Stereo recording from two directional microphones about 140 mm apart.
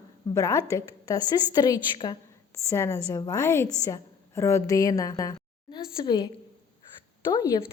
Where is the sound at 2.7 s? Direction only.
20° left (ahead or behind).